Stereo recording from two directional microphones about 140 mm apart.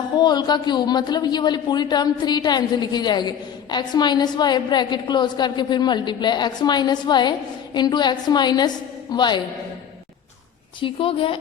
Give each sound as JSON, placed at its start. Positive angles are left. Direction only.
{"t": 0.2, "sound": "a woman's voice", "side_deg": 30}
{"t": 10.8, "sound": "a woman's voice", "side_deg": 40}